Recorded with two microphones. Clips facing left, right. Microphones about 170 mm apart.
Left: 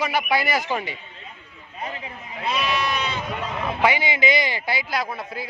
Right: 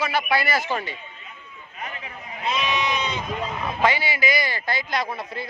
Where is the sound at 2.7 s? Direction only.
20° right (ahead or behind).